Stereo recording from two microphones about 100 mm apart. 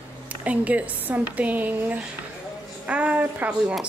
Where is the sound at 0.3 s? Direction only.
15° right (ahead or behind).